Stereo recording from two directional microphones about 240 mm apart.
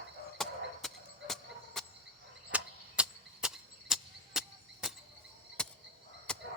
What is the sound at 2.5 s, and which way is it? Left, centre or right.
Chop, centre.